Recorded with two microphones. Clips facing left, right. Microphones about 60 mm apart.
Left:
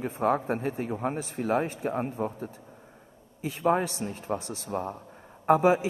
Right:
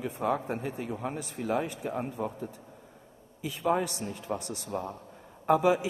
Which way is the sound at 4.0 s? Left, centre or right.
Left.